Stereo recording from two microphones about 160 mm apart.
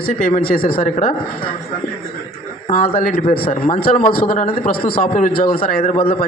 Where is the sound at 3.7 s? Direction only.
60° left (ahead or behind).